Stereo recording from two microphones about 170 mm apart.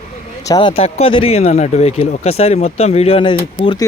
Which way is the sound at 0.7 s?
35° left (ahead or behind).